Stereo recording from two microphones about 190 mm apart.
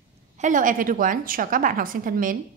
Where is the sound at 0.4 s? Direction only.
45° right (ahead or behind).